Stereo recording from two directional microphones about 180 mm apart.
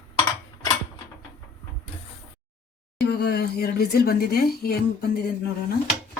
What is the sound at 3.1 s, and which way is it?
A woman's voice, 65° left (ahead or behind).